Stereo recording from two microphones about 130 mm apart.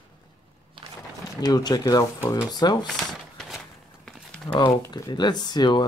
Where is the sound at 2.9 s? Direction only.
5° left (ahead or behind).